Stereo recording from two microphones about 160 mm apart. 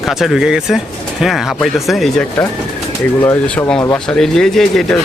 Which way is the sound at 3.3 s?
10° left (ahead or behind).